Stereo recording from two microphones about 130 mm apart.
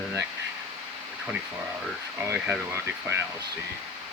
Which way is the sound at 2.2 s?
20° right (ahead or behind).